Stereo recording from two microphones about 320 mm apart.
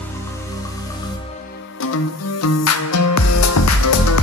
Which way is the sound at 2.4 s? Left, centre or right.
Left.